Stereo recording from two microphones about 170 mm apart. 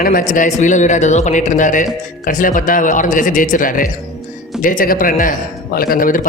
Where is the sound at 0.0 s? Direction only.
55° left (ahead or behind).